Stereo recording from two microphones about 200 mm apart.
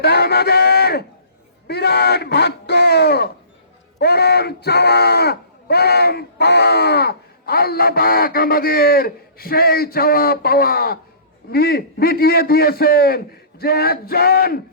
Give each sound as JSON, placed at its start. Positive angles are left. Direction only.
{"t": 0.0, "sound": "speech", "side_deg": 55}